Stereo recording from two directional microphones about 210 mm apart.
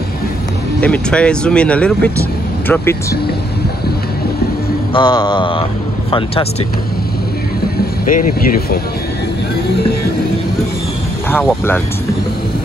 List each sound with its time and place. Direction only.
0.7 s speech: 5° left (ahead or behind)
4.9 s mantra: 20° left (ahead or behind)
8.0 s speech: 40° left (ahead or behind)
11.2 s speech: 10° left (ahead or behind)